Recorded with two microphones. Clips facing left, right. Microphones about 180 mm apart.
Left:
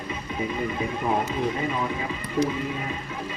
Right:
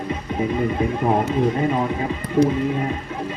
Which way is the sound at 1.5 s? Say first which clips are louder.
Right 6 dB; 45° right (ahead or behind).